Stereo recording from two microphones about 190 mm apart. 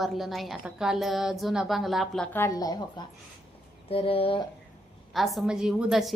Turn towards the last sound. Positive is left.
turn(degrees=0)  # may be behind; listen again after turning